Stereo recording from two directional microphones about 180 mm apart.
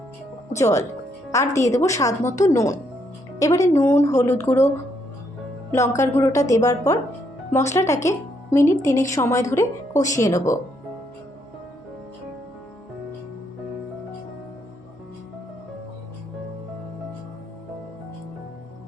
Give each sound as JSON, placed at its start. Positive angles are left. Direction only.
{"t": 0.5, "sound": "speech", "side_deg": 15}
{"t": 5.7, "sound": "speech", "side_deg": 15}